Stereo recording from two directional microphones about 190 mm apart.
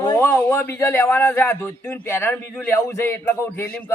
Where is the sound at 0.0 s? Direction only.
15° left (ahead or behind).